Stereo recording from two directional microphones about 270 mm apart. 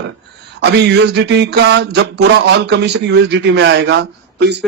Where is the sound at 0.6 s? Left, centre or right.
Right.